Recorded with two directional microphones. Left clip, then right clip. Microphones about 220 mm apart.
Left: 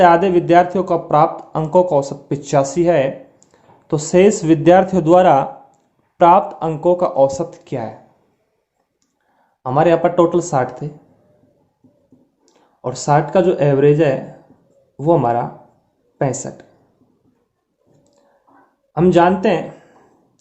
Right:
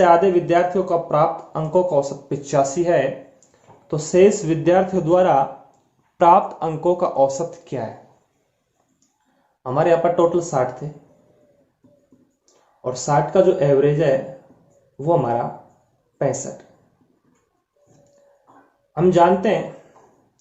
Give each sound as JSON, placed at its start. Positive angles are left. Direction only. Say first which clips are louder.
{"t": 0.0, "sound": "speech", "louder": "left 3 dB", "side_deg": 40}
{"t": 6.1, "sound": "speech", "louder": "left 3 dB", "side_deg": 25}
{"t": 9.6, "sound": "speech", "louder": "left 3 dB", "side_deg": 40}
{"t": 12.8, "sound": "speech", "louder": "left 3 dB", "side_deg": 45}
{"t": 18.9, "sound": "speech", "louder": "left 2 dB", "side_deg": 45}